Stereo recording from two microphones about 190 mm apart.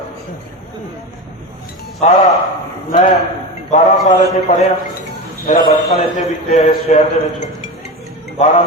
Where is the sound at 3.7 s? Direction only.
45° left (ahead or behind).